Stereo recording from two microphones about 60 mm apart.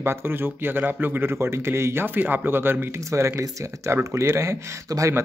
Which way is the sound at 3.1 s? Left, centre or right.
Right.